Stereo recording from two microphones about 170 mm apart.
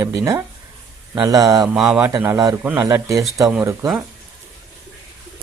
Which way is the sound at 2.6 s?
10° right (ahead or behind).